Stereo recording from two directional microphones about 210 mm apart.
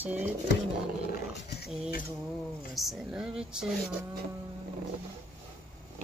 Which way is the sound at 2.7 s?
Centre (ahead or behind).